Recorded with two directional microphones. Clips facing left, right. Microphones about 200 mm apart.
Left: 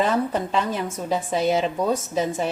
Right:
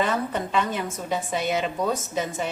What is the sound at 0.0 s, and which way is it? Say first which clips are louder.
A woman's voice: left 3 dB; 30° left (ahead or behind).